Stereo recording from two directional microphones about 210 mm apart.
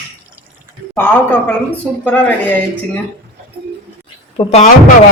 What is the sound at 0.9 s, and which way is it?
Speech, 10° left (ahead or behind).